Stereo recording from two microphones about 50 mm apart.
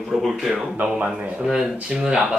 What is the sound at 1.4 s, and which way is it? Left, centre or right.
Speech, centre.